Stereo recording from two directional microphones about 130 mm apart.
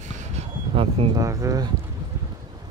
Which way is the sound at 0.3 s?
55° right (ahead or behind).